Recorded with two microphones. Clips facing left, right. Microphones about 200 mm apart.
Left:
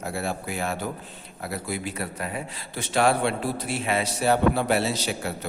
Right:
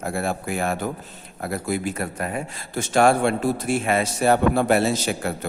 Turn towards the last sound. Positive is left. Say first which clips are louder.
# right 5 dB
turn(degrees=-50)  # may be behind; listen again after turning